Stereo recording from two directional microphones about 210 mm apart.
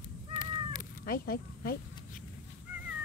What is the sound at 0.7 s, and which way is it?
Cat, 45° left (ahead or behind).